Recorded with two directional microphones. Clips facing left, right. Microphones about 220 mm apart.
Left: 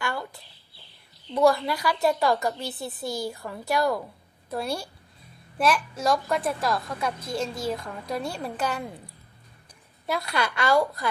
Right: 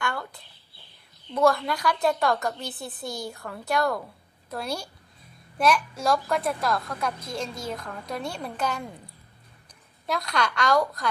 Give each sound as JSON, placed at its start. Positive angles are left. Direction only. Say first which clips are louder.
{"t": 0.0, "sound": "a sound", "louder": "even", "side_deg": 5}
{"t": 1.3, "sound": "a woman's voice", "louder": "left 1 dB", "side_deg": 0}
{"t": 10.1, "sound": "a woman's voice", "louder": "even", "side_deg": 5}